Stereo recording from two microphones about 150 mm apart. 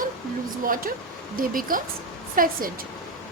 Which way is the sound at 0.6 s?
70° right (ahead or behind).